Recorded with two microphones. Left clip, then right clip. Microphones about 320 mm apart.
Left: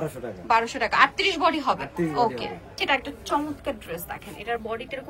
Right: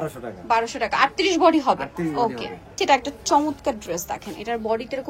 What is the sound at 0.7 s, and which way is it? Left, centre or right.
A woman's voice, centre.